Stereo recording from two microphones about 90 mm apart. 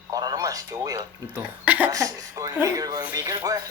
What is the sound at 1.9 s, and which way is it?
Speech, 40° right (ahead or behind).